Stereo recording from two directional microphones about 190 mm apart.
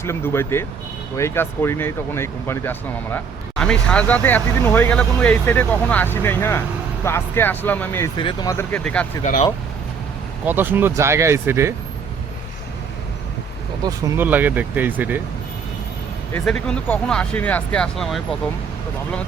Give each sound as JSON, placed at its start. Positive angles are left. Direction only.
{"t": 0.0, "sound": "speech", "side_deg": 15}
{"t": 8.2, "sound": "speech", "side_deg": 25}
{"t": 9.2, "sound": "speech", "side_deg": 40}
{"t": 10.4, "sound": "speech", "side_deg": -10}
{"t": 13.8, "sound": "speech", "side_deg": -10}
{"t": 16.5, "sound": "speech", "side_deg": 5}